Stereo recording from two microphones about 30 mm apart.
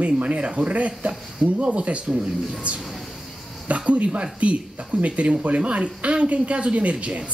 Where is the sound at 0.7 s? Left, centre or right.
Right.